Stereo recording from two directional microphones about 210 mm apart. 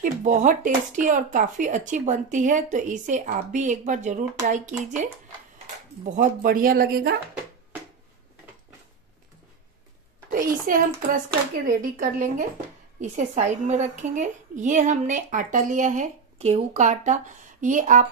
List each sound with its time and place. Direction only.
0.0 s speech: 40° right (ahead or behind)
6.0 s speech: 40° right (ahead or behind)
10.3 s speech: 40° right (ahead or behind)